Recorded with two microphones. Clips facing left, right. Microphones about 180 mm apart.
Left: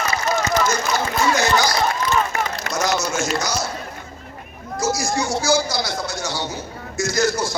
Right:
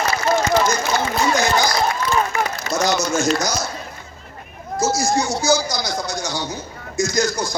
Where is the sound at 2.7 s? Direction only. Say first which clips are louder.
Right 3 dB; 65° left (ahead or behind).